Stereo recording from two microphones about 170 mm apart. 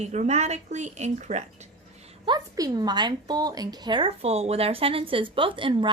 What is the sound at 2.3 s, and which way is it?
A woman's voice, 20° right (ahead or behind).